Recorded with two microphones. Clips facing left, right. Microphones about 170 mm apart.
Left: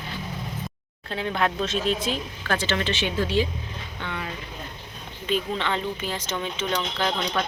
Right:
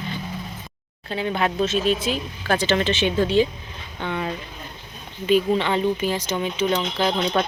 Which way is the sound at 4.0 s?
20° right (ahead or behind).